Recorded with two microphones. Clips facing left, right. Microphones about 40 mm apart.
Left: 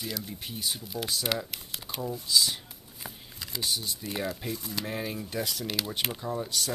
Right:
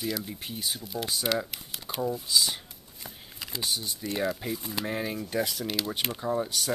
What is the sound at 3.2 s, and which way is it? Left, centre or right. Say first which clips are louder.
Speech: right 1 dB; centre.